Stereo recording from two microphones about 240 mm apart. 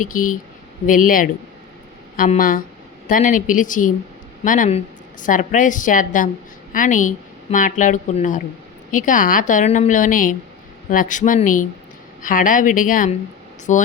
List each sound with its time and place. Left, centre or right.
0.0 s a woman's voice: left